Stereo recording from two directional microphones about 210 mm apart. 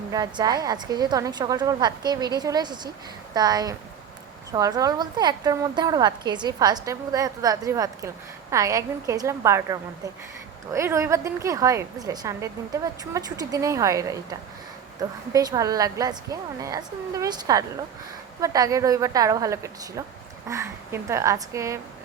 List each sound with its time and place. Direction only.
0.1 s a woman's voice: 20° right (ahead or behind)